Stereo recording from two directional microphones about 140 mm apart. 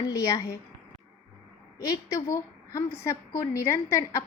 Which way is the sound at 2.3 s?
20° left (ahead or behind).